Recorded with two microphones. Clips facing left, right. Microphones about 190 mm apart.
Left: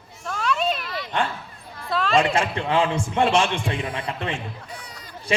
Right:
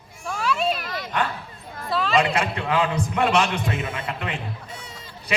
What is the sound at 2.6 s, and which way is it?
A man's voice, 25° left (ahead or behind).